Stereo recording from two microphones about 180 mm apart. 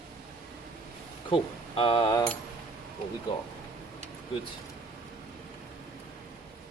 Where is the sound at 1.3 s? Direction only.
30° left (ahead or behind).